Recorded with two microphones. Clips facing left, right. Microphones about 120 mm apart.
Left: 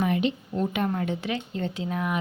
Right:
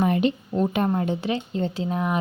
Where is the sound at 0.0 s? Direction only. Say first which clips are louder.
Right 3 dB; 40° right (ahead or behind).